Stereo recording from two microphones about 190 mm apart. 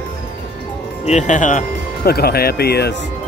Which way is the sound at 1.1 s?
40° left (ahead or behind).